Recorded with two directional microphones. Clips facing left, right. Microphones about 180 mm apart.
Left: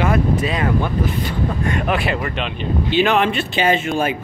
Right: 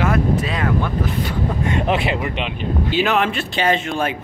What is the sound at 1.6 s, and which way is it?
Speech, 25° right (ahead or behind).